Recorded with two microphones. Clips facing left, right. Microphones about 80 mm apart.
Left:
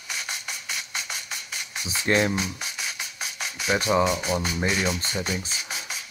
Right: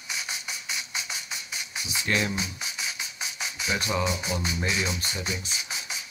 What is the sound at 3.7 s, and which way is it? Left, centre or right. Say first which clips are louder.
Speech: left 6 dB; left.